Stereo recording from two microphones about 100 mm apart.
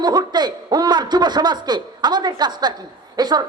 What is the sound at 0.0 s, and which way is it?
A man's voice, 45° right (ahead or behind).